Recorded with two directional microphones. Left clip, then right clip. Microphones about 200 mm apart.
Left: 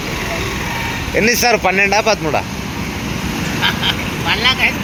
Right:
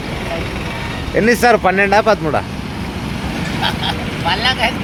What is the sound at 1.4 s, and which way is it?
Speech, 20° right (ahead or behind).